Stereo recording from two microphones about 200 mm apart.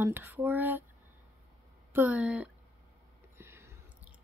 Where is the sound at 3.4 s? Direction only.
10° right (ahead or behind).